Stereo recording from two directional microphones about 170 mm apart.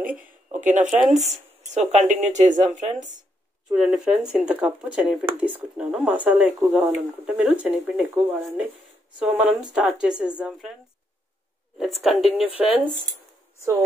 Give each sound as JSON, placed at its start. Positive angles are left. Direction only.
{"t": 0.5, "sound": "speech", "side_deg": -50}
{"t": 0.8, "sound": "speech", "side_deg": 0}
{"t": 1.7, "sound": "speech", "side_deg": -40}
{"t": 3.7, "sound": "speech", "side_deg": -5}
{"t": 11.8, "sound": "speech", "side_deg": 0}